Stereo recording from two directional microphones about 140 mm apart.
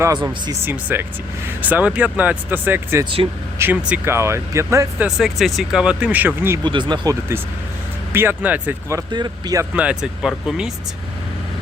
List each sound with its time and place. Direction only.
0.6 s speech: 15° right (ahead or behind)
3.0 s speech: 40° right (ahead or behind)
3.6 s speech: 10° right (ahead or behind)
5.0 s speech: centre (ahead or behind)
6.6 s speech: 35° right (ahead or behind)
8.1 s speech: 15° right (ahead or behind)
9.0 s speech: 30° right (ahead or behind)
9.7 s speech: 5° right (ahead or behind)